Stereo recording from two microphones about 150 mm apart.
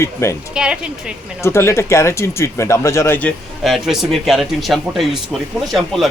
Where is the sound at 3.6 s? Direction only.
Centre (ahead or behind).